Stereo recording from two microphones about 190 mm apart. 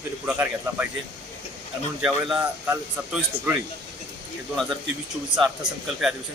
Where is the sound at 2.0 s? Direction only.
5° right (ahead or behind).